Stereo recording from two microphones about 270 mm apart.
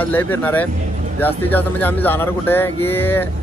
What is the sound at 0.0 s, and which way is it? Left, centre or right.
Speech, centre.